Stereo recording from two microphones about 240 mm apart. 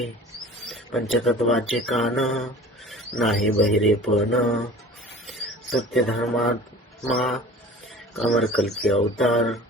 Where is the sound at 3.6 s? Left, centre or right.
Centre.